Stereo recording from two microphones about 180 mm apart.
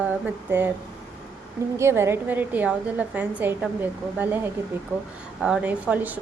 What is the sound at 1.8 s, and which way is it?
Speech, 15° right (ahead or behind).